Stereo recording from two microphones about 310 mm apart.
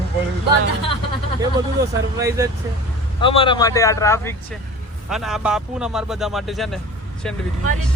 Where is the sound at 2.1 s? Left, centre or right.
Centre.